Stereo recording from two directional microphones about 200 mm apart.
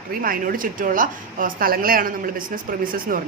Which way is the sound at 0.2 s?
45° right (ahead or behind).